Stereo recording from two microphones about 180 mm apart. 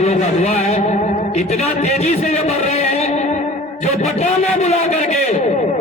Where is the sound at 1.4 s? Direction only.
35° left (ahead or behind).